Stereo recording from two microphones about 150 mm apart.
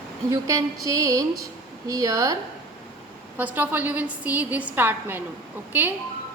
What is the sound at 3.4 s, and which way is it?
A woman's voice, 10° right (ahead or behind).